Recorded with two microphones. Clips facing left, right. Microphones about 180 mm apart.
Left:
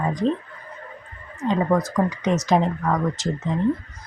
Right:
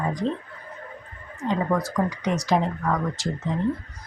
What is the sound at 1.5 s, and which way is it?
Speech, 20° left (ahead or behind).